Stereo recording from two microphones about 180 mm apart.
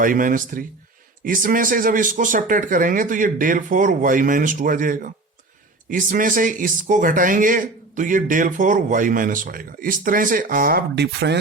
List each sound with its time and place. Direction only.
0.0 s speech: 50° right (ahead or behind); by 11.3 s 70° right (ahead or behind)